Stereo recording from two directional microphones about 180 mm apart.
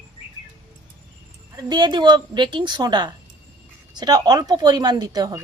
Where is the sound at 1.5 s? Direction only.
25° right (ahead or behind).